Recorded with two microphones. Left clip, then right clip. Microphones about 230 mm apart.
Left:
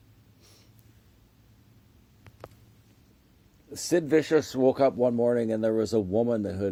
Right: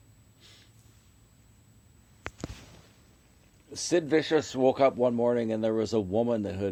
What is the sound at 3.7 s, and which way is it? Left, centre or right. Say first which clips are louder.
A man's voice: left 2 dB; left.